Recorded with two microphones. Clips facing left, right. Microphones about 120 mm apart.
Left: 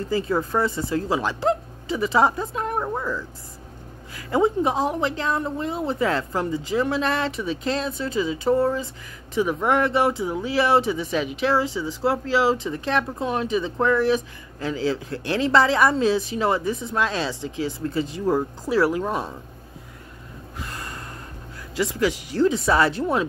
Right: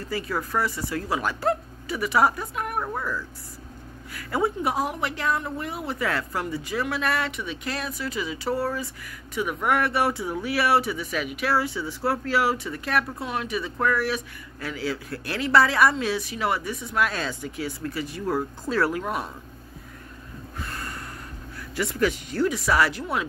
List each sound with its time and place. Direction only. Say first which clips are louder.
0.1 s a woman's voice: left 4 dB; 25° left (ahead or behind)
19.0 s a woman's voice: left 3 dB; 25° left (ahead or behind)
20.6 s gasp: even; 15° left (ahead or behind)
21.7 s a woman's voice: left 2 dB; 15° left (ahead or behind)